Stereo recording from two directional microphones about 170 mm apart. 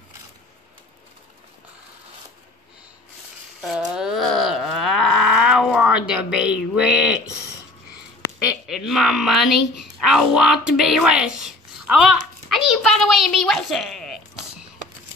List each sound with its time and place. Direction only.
3.6 s cattle: centre (ahead or behind)
8.6 s speech: centre (ahead or behind)
12.6 s a sound: centre (ahead or behind)